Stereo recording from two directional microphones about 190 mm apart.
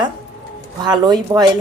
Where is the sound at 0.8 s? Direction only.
20° right (ahead or behind).